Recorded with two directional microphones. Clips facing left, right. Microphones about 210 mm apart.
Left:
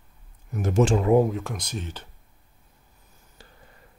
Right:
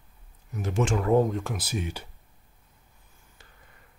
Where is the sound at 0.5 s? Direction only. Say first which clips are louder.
Left 6 dB; 50° left (ahead or behind).